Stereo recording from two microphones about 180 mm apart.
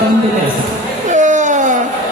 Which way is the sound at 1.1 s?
45° right (ahead or behind).